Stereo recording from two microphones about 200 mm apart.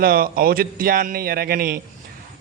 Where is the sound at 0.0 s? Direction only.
45° right (ahead or behind).